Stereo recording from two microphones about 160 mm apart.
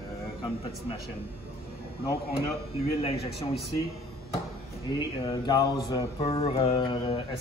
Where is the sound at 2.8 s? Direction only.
35° left (ahead or behind).